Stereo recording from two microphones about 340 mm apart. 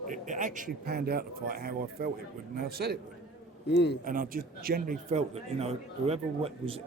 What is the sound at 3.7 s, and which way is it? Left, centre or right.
Speech, left.